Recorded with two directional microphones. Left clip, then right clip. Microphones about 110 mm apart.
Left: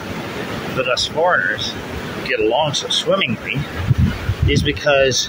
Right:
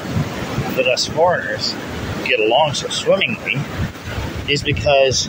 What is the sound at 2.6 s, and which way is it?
Speech, 15° left (ahead or behind).